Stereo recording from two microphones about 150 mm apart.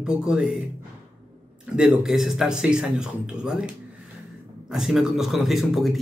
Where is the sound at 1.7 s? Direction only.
5° right (ahead or behind).